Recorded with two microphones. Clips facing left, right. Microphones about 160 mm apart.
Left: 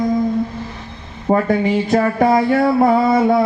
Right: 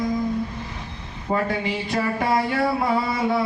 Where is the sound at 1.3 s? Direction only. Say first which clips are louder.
Left 8 dB; 50° left (ahead or behind).